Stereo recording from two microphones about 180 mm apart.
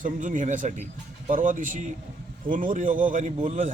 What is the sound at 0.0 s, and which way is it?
A man's voice, 45° right (ahead or behind).